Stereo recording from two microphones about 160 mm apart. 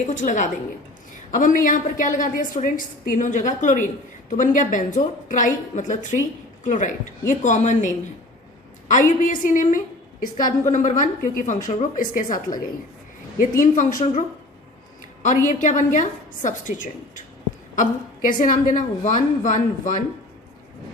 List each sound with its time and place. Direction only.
0.1 s a woman's voice: 50° left (ahead or behind)